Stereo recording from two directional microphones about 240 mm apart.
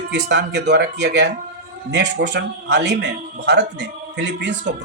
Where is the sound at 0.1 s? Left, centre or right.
Right.